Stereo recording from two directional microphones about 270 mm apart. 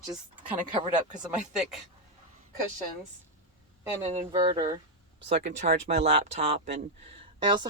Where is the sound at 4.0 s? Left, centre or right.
Right.